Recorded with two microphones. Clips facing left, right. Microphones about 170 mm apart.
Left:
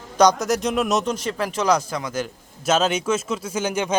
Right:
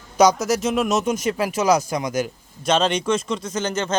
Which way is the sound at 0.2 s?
5° right (ahead or behind).